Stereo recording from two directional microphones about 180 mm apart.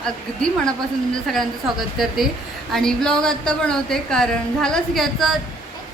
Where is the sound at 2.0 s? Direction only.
Centre (ahead or behind).